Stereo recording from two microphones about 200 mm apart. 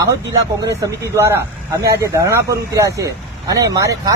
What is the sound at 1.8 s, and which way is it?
Speech, 15° right (ahead or behind).